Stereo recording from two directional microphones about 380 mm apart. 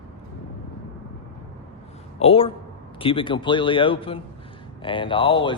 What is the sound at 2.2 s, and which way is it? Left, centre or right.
Speech, centre.